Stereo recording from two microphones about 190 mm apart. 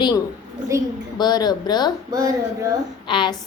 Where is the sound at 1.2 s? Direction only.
20° left (ahead or behind).